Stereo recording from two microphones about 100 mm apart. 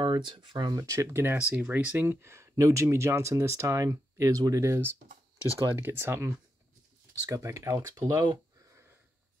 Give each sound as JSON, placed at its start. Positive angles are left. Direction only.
{"t": 0.0, "sound": "speech", "side_deg": -55}
{"t": 0.7, "sound": "speech", "side_deg": -30}